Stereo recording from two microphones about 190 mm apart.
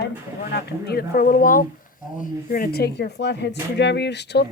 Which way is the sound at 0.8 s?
50° left (ahead or behind).